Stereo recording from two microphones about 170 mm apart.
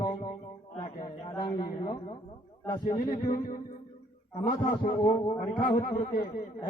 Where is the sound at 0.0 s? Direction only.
25° left (ahead or behind).